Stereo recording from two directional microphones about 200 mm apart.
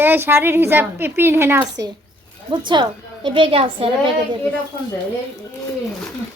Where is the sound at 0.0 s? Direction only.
10° right (ahead or behind).